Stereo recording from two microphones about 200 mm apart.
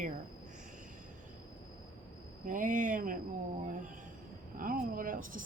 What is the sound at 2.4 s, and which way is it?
Speech, 40° right (ahead or behind).